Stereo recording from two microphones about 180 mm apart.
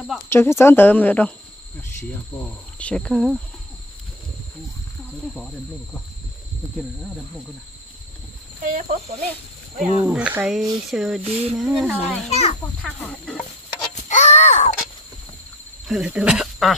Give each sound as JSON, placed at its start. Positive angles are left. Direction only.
{"t": 0.3, "sound": "speech", "side_deg": 15}
{"t": 2.8, "sound": "speech", "side_deg": 5}
{"t": 6.8, "sound": "speech", "side_deg": 0}
{"t": 8.7, "sound": "speech", "side_deg": -35}
{"t": 9.8, "sound": "speech", "side_deg": -5}
{"t": 11.2, "sound": "speech", "side_deg": -35}
{"t": 11.5, "sound": "speech", "side_deg": 0}
{"t": 12.3, "sound": "a child's voice", "side_deg": 35}
{"t": 12.8, "sound": "speech", "side_deg": 5}
{"t": 14.0, "sound": "a sound", "side_deg": 40}
{"t": 15.9, "sound": "speech", "side_deg": -5}